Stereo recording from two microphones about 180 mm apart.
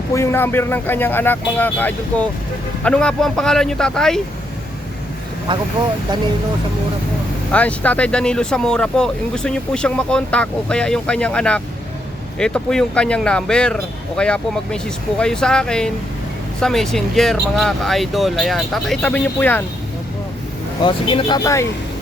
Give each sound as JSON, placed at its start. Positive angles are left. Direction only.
{"t": 0.1, "sound": "speech", "side_deg": 15}
{"t": 5.5, "sound": "speech", "side_deg": -25}
{"t": 7.5, "sound": "speech", "side_deg": 10}
{"t": 20.8, "sound": "speech", "side_deg": 25}